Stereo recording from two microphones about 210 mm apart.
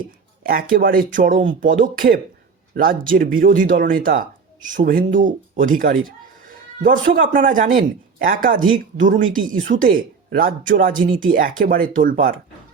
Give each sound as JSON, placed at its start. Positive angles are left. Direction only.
{"t": 0.0, "sound": "speech", "side_deg": -40}
{"t": 7.1, "sound": "speech", "side_deg": -40}